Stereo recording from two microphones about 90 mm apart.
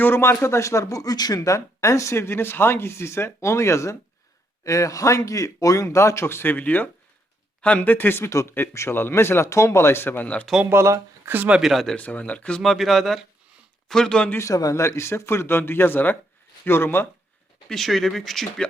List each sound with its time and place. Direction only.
0.0 s speech: 25° left (ahead or behind)
10.7 s speech: 30° right (ahead or behind)
11.3 s speech: 10° right (ahead or behind)
11.9 s speech: 15° left (ahead or behind)
14.3 s speech: 35° left (ahead or behind)
17.7 s speech: centre (ahead or behind)